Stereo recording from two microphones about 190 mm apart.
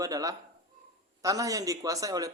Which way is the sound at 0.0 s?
20° right (ahead or behind).